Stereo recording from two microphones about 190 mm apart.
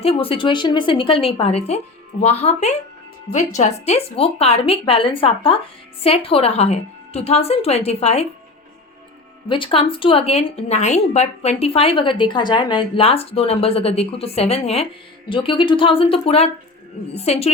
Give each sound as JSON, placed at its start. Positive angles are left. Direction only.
{"t": 0.0, "sound": "a woman's voice", "side_deg": 30}
{"t": 9.5, "sound": "a woman's voice", "side_deg": 25}